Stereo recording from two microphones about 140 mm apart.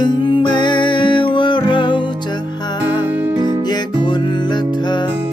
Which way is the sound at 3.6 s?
30° left (ahead or behind).